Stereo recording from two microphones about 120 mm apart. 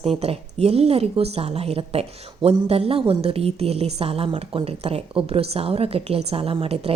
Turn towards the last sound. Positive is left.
turn(degrees=-55)  # may be behind; listen again after turning